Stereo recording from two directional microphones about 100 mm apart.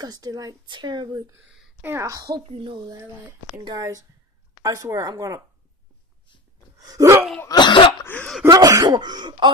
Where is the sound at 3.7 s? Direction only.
35° right (ahead or behind).